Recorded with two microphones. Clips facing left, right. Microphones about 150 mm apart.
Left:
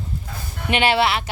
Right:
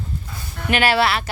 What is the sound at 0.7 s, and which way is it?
Speech, 20° left (ahead or behind).